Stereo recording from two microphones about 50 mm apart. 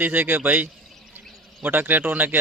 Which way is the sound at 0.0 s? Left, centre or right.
Right.